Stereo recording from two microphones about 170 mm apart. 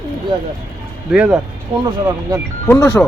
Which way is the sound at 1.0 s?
5° right (ahead or behind).